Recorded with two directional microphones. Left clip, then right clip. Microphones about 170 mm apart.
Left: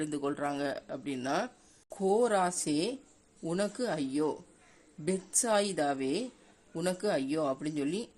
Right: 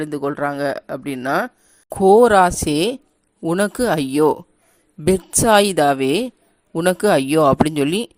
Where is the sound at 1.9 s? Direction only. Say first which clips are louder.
Right 17 dB; 50° right (ahead or behind).